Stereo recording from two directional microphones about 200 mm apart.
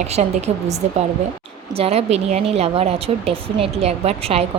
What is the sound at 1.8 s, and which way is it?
A woman's voice, 30° right (ahead or behind).